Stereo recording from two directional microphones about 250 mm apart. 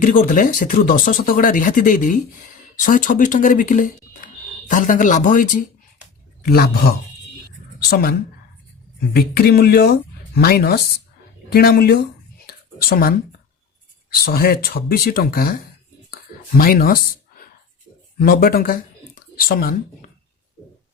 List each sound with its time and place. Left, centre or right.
0.0 s speech: left
9.1 s speech: left
14.1 s speech: left
16.0 s a sound: left
18.2 s speech: left